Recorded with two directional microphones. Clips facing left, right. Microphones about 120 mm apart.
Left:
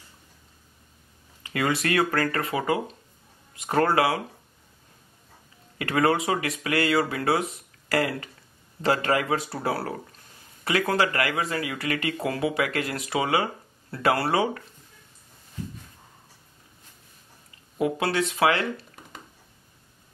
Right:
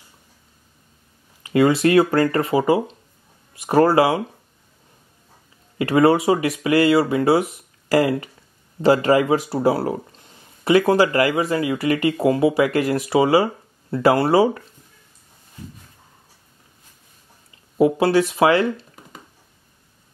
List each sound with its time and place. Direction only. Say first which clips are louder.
1.5 s speech: right 10 dB; 30° right (ahead or behind)
5.8 s speech: right 7 dB; 25° right (ahead or behind)
17.7 s speech: right 9 dB; 30° right (ahead or behind)
18.8 s a sound: right 2 dB; 5° right (ahead or behind)